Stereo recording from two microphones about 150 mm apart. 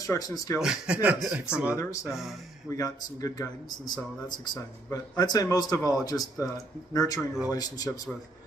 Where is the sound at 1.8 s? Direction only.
20° left (ahead or behind).